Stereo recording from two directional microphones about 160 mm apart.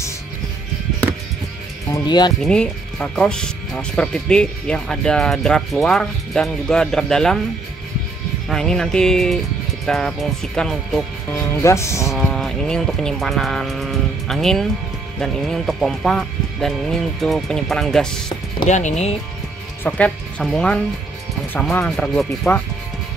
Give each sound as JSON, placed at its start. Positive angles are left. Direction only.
{"t": 2.0, "sound": "speech", "side_deg": 25}
{"t": 2.4, "sound": "speech", "side_deg": 5}
{"t": 8.5, "sound": "speech", "side_deg": 5}
{"t": 11.5, "sound": "speech", "side_deg": 20}
{"t": 12.1, "sound": "speech", "side_deg": 0}
{"t": 18.7, "sound": "speech", "side_deg": 45}
{"t": 19.8, "sound": "speech", "side_deg": 10}